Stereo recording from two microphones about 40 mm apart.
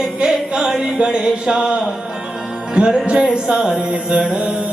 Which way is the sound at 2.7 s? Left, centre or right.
Right.